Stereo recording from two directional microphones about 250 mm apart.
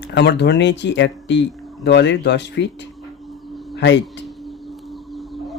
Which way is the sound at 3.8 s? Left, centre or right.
Left.